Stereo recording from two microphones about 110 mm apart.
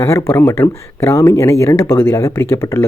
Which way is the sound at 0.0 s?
25° left (ahead or behind).